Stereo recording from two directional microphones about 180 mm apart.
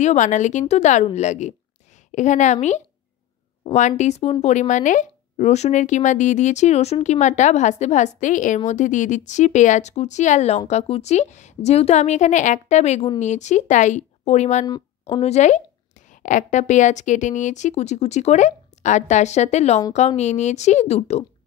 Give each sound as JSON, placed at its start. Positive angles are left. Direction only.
{"t": 0.0, "sound": "speech", "side_deg": 40}